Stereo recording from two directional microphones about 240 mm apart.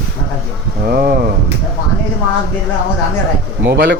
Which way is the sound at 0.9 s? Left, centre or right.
Right.